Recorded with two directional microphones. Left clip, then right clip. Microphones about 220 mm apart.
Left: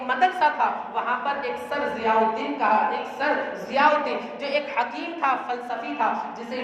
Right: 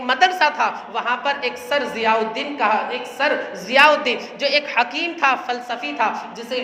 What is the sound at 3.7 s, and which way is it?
A woman's voice, 50° right (ahead or behind).